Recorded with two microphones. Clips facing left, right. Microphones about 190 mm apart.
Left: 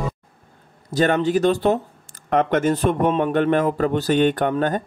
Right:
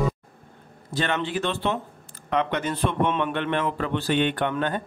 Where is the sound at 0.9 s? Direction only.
40° left (ahead or behind).